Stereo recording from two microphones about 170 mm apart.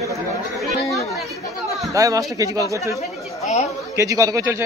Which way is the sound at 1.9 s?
20° right (ahead or behind).